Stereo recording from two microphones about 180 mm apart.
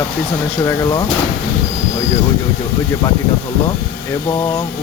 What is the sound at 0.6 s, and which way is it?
Speech, 20° left (ahead or behind).